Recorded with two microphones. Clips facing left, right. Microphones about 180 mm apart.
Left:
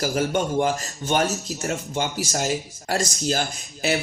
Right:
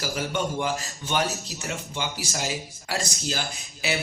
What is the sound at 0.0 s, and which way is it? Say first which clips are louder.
A man's voice: left 5 dB; 45° left (ahead or behind).